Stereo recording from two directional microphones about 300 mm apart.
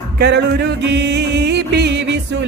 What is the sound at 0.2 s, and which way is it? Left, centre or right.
Music, right.